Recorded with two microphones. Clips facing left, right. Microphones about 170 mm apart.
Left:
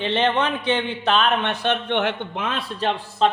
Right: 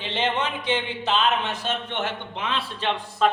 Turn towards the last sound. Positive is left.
turn(degrees=30)  # may be behind; listen again after turning